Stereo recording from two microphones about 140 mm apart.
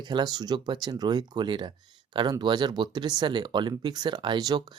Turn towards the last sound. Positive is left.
turn(degrees=-30)  # may be behind; listen again after turning